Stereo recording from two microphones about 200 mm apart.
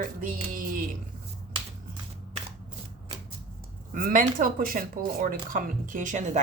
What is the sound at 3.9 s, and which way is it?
Speech, 45° right (ahead or behind).